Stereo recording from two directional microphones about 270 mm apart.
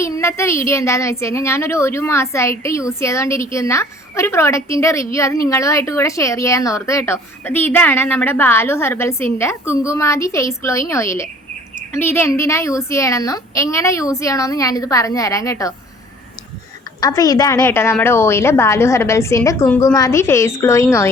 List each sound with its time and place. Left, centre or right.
0.0 s a woman's voice: centre
17.0 s a woman's voice: centre